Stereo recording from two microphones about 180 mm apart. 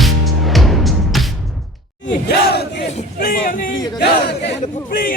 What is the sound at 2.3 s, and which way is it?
Battle cry, 65° left (ahead or behind).